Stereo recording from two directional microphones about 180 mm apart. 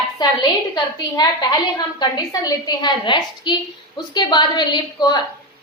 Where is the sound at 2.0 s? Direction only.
20° left (ahead or behind).